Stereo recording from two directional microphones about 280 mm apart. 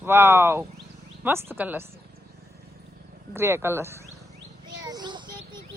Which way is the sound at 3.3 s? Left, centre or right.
Centre.